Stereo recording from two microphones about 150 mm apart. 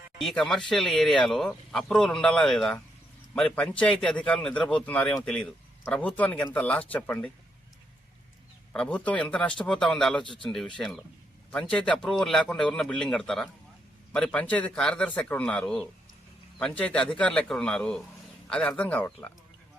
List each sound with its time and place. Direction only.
0.2 s a man's voice: centre (ahead or behind)
8.7 s speech: 5° left (ahead or behind)
10.2 s speech: 35° left (ahead or behind)
10.8 s a man's voice: centre (ahead or behind)